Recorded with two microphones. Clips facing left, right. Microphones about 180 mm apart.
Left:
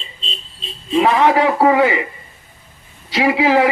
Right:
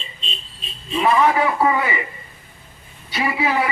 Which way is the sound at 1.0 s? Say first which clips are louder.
Left 2 dB; 90° left.